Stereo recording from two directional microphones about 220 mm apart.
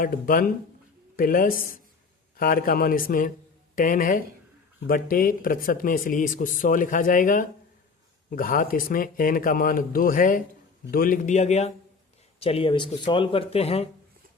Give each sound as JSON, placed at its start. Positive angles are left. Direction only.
{"t": 0.0, "sound": "speech", "side_deg": 40}